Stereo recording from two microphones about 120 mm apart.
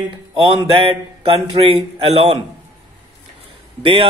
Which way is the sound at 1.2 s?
50° right (ahead or behind).